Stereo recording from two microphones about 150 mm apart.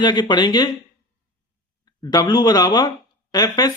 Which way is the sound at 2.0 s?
25° left (ahead or behind).